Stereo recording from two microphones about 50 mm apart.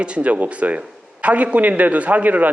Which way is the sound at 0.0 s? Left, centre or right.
Right.